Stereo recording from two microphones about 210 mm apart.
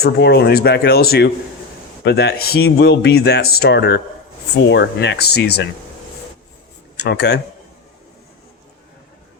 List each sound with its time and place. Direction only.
0.0 s speech: 50° left (ahead or behind)
6.9 s speech: 50° left (ahead or behind)